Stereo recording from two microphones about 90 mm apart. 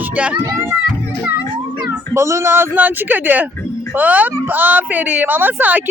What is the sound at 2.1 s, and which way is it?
A woman's voice, 30° right (ahead or behind).